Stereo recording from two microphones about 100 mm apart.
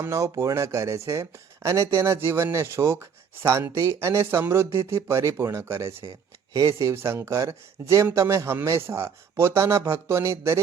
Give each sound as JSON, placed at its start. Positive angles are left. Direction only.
{"t": 0.0, "sound": "speech", "side_deg": -30}